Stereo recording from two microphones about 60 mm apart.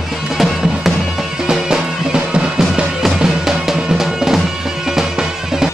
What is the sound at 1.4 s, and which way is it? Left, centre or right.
Music, centre.